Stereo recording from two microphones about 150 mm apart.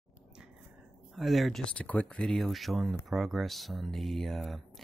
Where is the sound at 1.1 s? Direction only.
Centre (ahead or behind).